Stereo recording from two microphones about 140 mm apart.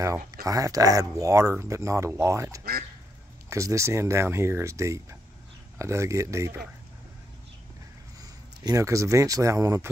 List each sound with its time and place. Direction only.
0.3 s speech: 25° right (ahead or behind)
8.2 s speech: 25° right (ahead or behind)